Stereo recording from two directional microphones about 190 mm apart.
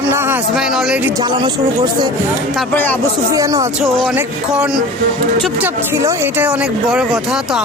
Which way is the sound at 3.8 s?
Centre (ahead or behind).